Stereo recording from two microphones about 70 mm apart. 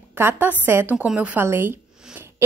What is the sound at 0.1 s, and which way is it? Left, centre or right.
Speech, right.